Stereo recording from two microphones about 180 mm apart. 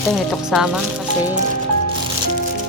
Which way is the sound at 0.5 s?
Centre (ahead or behind).